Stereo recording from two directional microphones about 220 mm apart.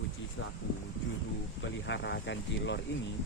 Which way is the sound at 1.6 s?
55° left (ahead or behind).